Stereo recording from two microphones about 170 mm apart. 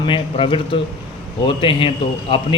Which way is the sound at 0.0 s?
30° left (ahead or behind).